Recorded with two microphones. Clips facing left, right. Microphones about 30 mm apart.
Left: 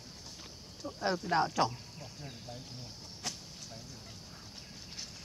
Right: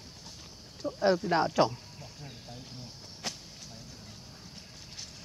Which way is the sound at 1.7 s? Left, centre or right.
Centre.